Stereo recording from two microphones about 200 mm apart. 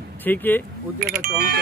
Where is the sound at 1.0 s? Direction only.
50° right (ahead or behind).